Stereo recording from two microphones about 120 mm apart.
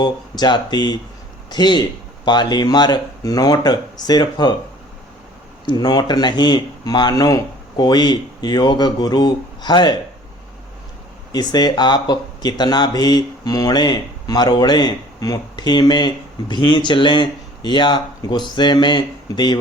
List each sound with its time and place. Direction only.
0.0 s speech: 40° left (ahead or behind)
5.6 s speech: 35° left (ahead or behind)
11.3 s speech: 35° left (ahead or behind)